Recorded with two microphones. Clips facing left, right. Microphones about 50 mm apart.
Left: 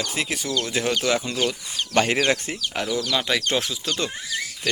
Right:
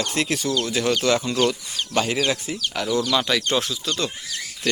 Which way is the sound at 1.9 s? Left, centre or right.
Left.